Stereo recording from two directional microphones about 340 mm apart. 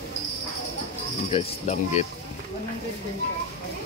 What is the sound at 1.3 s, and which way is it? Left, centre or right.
Speech, centre.